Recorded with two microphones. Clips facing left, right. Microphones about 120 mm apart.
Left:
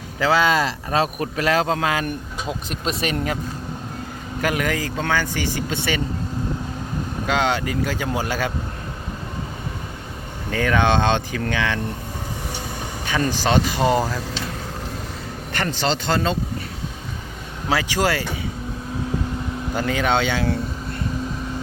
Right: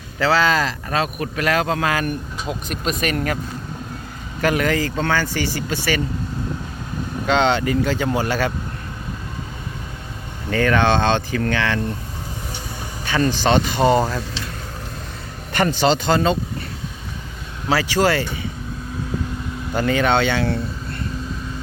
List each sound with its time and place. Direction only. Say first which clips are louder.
0.2 s speech: even; 15° left (ahead or behind)
4.4 s speech: right 4 dB; 10° left (ahead or behind)
7.3 s speech: right 4 dB; 5° left (ahead or behind)
10.5 s speech: right 2 dB; 10° left (ahead or behind)
13.1 s speech: right 3 dB; 10° left (ahead or behind)
15.5 s speech: right 6 dB; 15° right (ahead or behind)
17.7 s speech: right 3 dB; 15° left (ahead or behind)
19.7 s speech: right 3 dB; 5° left (ahead or behind)